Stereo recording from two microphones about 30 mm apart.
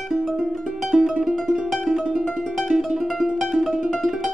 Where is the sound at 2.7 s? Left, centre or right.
Centre.